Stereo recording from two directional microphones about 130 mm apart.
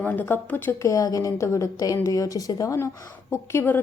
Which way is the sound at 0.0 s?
15° left (ahead or behind).